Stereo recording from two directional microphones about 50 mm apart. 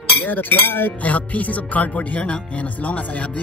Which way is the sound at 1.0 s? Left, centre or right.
Left.